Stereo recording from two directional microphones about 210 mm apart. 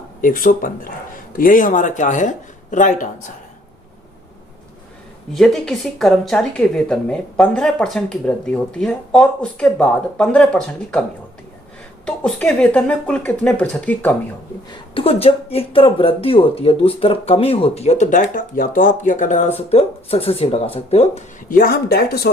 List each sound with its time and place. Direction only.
0.2 s a man's voice: 40° left (ahead or behind)
5.3 s speech: centre (ahead or behind)
12.0 s speech: 5° left (ahead or behind)
14.9 s speech: 25° left (ahead or behind); by 22.3 s 50° left (ahead or behind)